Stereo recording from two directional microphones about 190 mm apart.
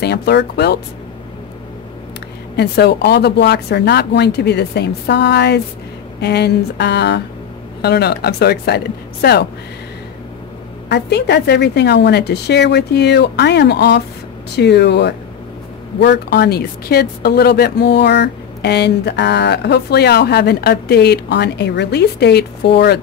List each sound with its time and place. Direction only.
0.0 s speech: 60° left (ahead or behind)
2.5 s speech: 60° left (ahead or behind)
10.9 s speech: 60° left (ahead or behind)